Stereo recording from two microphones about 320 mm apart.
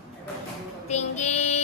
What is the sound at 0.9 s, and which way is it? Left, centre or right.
Child singing, left.